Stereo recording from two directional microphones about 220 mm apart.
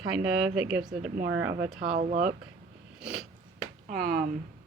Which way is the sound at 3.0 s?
Centre (ahead or behind).